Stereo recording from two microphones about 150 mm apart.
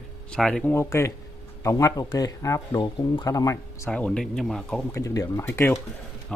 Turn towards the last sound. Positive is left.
turn(degrees=15)  # may be behind; listen again after turning